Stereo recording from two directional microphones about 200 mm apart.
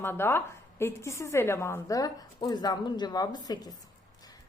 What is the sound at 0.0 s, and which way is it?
A woman's voice, 10° left (ahead or behind).